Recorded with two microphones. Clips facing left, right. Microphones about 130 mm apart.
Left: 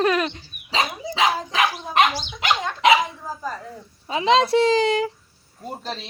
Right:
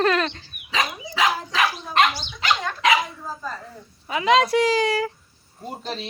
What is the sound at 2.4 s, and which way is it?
Speech, 20° left (ahead or behind).